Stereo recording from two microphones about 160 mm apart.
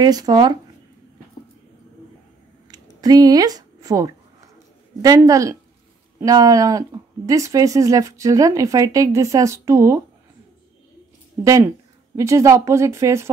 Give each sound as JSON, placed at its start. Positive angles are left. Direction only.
{"t": 0.0, "sound": "speech", "side_deg": -25}
{"t": 2.7, "sound": "a sound", "side_deg": -25}
{"t": 5.0, "sound": "speech", "side_deg": -20}
{"t": 11.4, "sound": "speech", "side_deg": -20}